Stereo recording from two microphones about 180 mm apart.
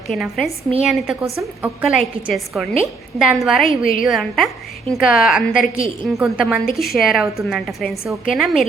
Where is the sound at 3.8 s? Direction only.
50° left (ahead or behind).